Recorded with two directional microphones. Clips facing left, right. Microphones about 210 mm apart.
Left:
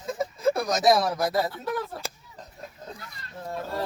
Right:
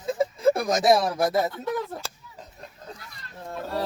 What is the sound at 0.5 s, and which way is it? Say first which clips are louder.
Speech: right 1 dB; 25° right (ahead or behind).